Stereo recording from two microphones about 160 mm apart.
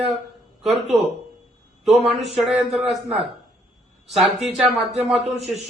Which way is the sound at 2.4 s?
Centre (ahead or behind).